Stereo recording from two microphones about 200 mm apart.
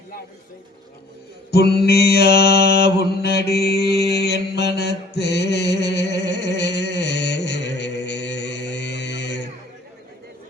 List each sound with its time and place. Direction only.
1.5 s mantra: 55° left (ahead or behind)